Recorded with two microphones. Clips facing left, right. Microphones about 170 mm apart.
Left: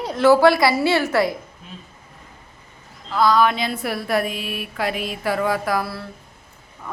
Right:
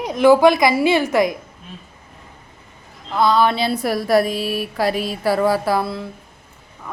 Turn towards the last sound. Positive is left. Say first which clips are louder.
# right 3 dB
turn(degrees=-20)  # may be behind; listen again after turning